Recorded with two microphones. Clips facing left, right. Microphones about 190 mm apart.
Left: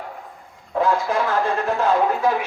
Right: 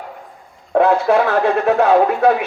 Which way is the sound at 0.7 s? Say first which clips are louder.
Right 7 dB; 65° right (ahead or behind).